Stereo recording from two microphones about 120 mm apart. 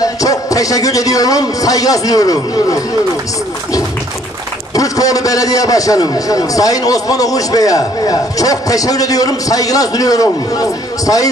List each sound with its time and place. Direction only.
0.0 s a man's voice: 30° left (ahead or behind)
4.7 s a man's voice: 30° left (ahead or behind)